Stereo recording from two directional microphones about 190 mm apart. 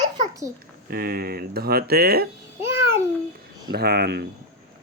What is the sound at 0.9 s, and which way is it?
Speech, 55° right (ahead or behind).